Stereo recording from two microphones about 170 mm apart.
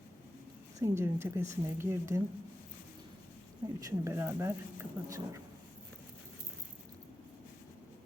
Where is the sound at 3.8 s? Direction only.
15° right (ahead or behind).